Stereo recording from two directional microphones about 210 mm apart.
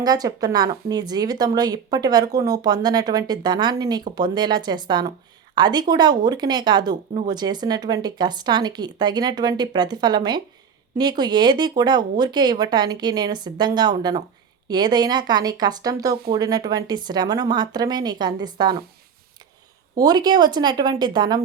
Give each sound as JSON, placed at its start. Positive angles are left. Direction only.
{"t": 0.0, "sound": "speech", "side_deg": -20}
{"t": 20.0, "sound": "speech", "side_deg": -20}